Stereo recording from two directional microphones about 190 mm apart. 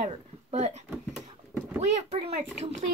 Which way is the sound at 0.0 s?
35° right (ahead or behind).